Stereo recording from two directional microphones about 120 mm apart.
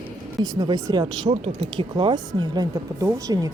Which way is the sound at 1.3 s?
50° right (ahead or behind).